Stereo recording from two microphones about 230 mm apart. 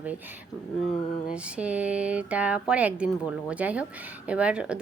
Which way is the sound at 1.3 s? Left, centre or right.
Centre.